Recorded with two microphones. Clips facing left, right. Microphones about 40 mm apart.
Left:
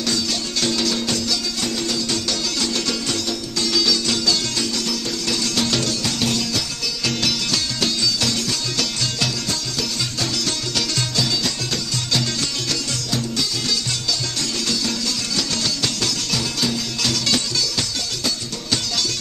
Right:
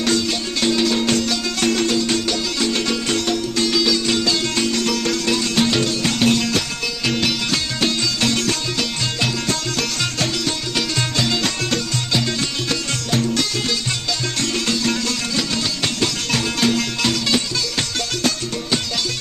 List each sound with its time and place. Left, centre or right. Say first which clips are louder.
0.6 s music: right 4 dB; right
1.0 s music: right 4 dB; right
2.0 s music: right 4 dB; right
7.1 s music: right 2 dB; right
8.0 s music: right 2 dB; right
11.0 s music: right 4 dB; right
12.1 s music: right 1 dB; right
13.1 s music: right 5 dB; right
14.7 s music: right 3 dB; right
17.0 s music: right 1 dB; right